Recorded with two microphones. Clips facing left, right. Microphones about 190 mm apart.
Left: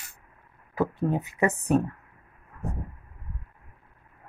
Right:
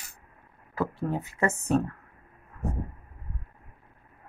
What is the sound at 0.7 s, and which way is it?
A woman's voice, 15° left (ahead or behind).